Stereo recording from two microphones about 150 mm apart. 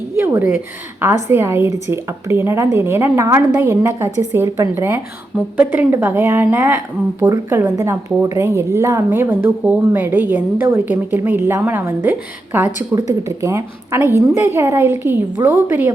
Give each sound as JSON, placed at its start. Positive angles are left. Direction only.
{"t": 0.2, "sound": "a woman's voice", "side_deg": -15}
{"t": 7.2, "sound": "a woman's voice", "side_deg": -25}